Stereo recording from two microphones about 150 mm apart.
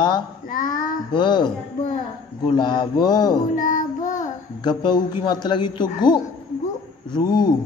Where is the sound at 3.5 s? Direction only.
60° left (ahead or behind).